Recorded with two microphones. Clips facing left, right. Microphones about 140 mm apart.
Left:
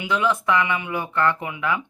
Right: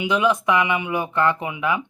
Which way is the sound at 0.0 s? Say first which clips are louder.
Right 3 dB; 15° right (ahead or behind).